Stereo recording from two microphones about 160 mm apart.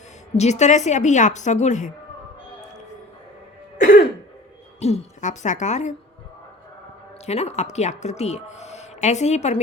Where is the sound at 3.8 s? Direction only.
60° left (ahead or behind).